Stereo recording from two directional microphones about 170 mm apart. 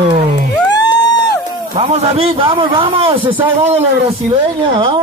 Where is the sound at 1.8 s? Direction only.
40° right (ahead or behind).